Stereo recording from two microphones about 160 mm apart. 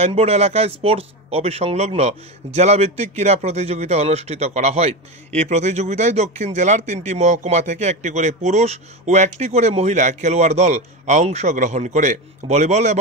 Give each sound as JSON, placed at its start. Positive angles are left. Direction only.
{"t": 0.0, "sound": "speech", "side_deg": -40}